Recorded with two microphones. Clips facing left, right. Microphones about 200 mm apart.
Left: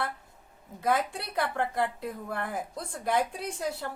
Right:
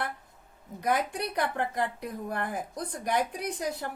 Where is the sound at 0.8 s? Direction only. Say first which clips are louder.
Even; 15° right (ahead or behind).